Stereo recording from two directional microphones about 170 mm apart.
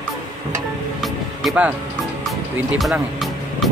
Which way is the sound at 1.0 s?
Centre (ahead or behind).